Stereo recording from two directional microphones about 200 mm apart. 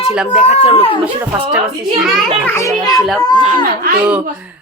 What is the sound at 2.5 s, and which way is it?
Speech, 15° left (ahead or behind).